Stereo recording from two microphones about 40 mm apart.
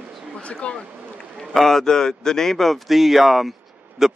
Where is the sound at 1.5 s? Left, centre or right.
Centre.